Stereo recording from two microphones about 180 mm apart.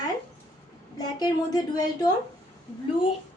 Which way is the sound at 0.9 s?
20° left (ahead or behind).